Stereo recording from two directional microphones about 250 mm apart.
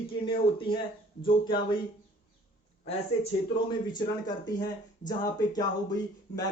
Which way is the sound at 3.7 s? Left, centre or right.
Centre.